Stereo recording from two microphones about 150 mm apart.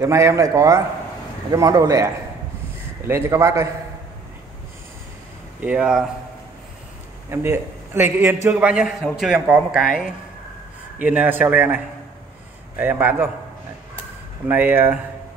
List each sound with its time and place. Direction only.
0.0 s a man's voice: 20° right (ahead or behind)
5.6 s speech: 10° right (ahead or behind)
7.2 s a man's voice: 15° right (ahead or behind)
14.5 s speech: 15° right (ahead or behind)